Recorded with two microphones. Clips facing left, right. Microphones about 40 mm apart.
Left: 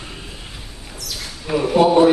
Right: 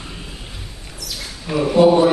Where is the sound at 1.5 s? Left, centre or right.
Centre.